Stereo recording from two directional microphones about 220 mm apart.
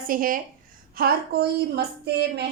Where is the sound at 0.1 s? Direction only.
40° right (ahead or behind).